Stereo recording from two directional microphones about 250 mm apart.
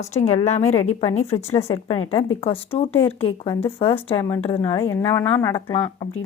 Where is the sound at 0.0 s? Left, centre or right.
Left.